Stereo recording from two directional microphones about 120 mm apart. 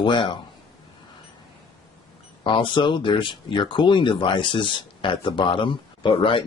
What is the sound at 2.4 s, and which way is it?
Speech, 45° left (ahead or behind).